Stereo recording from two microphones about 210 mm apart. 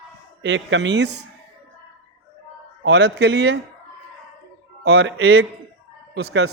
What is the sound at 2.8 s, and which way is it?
Speech, 55° right (ahead or behind).